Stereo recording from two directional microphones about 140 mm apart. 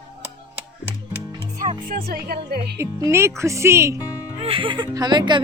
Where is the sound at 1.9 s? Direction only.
90° right.